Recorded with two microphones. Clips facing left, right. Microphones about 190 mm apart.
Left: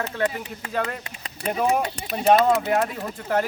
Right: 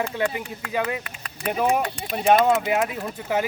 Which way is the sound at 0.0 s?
10° right (ahead or behind).